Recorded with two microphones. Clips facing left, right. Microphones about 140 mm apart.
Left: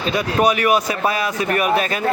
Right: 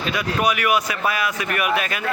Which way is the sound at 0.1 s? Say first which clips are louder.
Left 5 dB; 35° left (ahead or behind).